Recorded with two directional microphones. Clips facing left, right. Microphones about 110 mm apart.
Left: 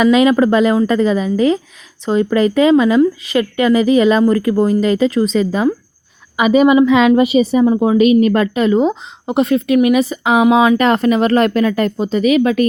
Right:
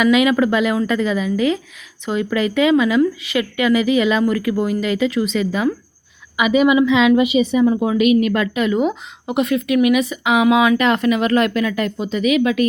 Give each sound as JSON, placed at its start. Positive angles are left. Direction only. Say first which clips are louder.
{"t": 0.0, "sound": "speech", "louder": "left 4 dB", "side_deg": 35}